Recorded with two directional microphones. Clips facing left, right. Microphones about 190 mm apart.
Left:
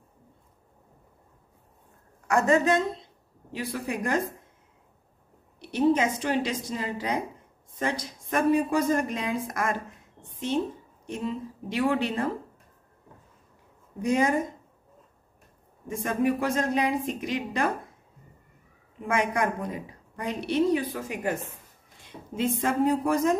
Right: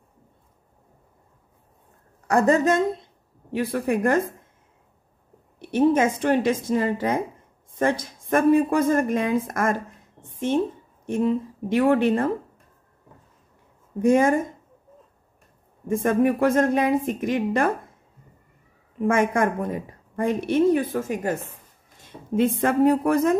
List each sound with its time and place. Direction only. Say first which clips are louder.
2.2 s a woman's voice: right 3 dB; 35° right (ahead or behind)
3.5 s a woman's voice: right 8 dB; 55° right (ahead or behind)
5.6 s a woman's voice: right 4 dB; 50° right (ahead or behind)
11.1 s a woman's voice: right 9 dB; 55° right (ahead or behind)
14.0 s a woman's voice: right 6 dB; 50° right (ahead or behind)
15.9 s a woman's voice: right 6 dB; 55° right (ahead or behind)
19.0 s a woman's voice: right 5 dB; 50° right (ahead or behind)
22.3 s a woman's voice: right 6 dB; 55° right (ahead or behind)